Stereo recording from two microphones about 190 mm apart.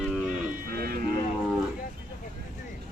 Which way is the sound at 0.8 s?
50° right (ahead or behind).